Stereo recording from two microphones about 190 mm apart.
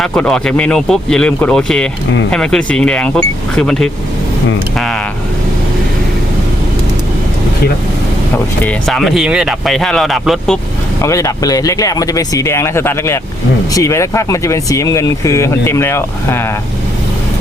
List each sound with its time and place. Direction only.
0.0 s speech: 5° left (ahead or behind)
8.6 s speech: centre (ahead or behind)
11.0 s speech: 15° left (ahead or behind)